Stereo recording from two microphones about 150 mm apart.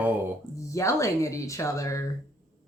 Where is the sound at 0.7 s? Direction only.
20° left (ahead or behind).